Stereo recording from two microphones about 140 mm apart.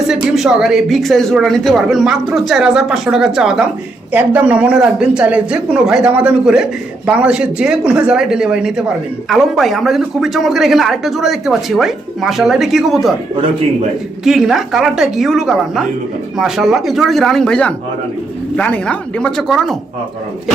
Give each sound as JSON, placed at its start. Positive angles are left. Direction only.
{"t": 0.1, "sound": "a man's voice", "side_deg": -5}
{"t": 14.3, "sound": "a man's voice", "side_deg": -5}